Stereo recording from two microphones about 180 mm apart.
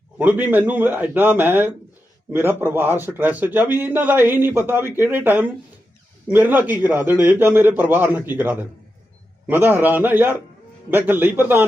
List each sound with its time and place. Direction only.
0.2 s a man's voice: 10° right (ahead or behind)